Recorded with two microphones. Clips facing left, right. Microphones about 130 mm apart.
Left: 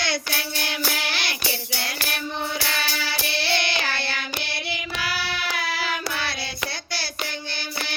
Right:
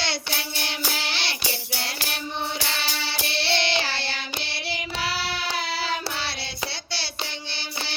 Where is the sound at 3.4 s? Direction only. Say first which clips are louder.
Right 2 dB; 25° right (ahead or behind).